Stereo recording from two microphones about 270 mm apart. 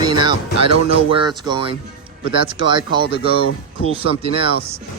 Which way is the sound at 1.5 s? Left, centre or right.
Centre.